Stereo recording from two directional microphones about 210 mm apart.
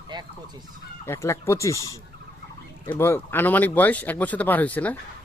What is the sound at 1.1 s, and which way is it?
Speech, 10° left (ahead or behind).